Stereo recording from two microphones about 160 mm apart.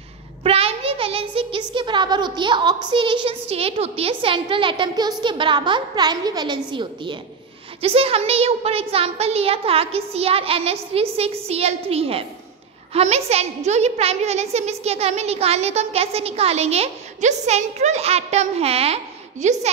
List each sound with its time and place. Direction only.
0.4 s child singing: 35° right (ahead or behind)
19.4 s a woman's voice: 45° right (ahead or behind)